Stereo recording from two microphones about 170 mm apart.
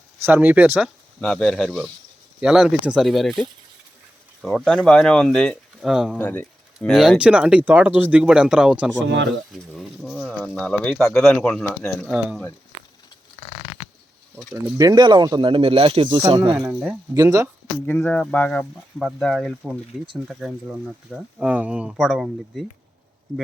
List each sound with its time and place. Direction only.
0.2 s speech: 10° right (ahead or behind)
1.2 s speech: 5° left (ahead or behind)
6.1 s speech: 10° left (ahead or behind)
9.0 s speech: 90° right
9.5 s speech: centre (ahead or behind)
14.8 s speech: 25° right (ahead or behind)
16.4 s speech: 20° right (ahead or behind)
17.8 s speech: 5° left (ahead or behind)